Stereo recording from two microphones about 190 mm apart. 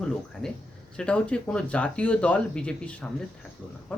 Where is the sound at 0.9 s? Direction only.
5° left (ahead or behind).